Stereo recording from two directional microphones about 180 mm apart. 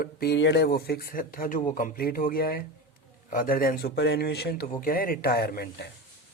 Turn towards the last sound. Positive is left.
turn(degrees=60)  # may be behind; listen again after turning